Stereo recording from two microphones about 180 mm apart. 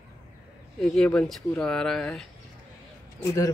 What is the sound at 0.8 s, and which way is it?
Speech, 5° left (ahead or behind).